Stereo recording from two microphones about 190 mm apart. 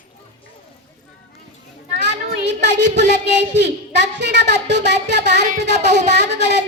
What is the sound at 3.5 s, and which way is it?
Child singing, 65° right (ahead or behind).